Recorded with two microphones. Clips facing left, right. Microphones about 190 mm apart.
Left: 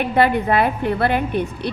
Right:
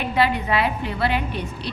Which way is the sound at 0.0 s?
50° left (ahead or behind).